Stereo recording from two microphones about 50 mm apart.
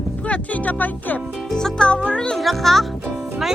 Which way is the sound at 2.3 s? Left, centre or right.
Centre.